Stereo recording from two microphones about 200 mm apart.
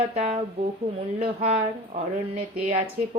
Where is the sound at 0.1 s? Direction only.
30° right (ahead or behind).